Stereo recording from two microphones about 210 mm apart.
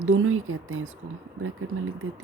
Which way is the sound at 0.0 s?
75° right (ahead or behind).